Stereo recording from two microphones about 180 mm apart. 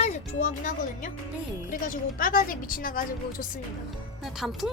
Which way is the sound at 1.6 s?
50° left (ahead or behind).